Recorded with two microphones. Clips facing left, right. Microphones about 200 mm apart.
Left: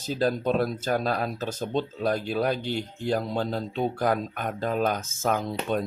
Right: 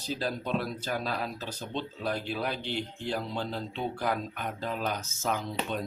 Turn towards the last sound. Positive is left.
turn(degrees=50)  # may be behind; listen again after turning